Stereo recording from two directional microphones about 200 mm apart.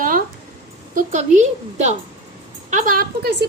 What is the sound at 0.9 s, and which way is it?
A woman's voice, 35° right (ahead or behind).